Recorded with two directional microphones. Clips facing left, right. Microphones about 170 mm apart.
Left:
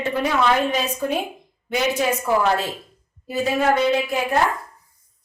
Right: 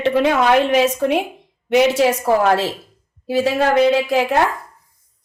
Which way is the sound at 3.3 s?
90° right.